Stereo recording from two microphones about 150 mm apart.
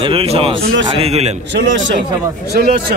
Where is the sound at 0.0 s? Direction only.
40° right (ahead or behind).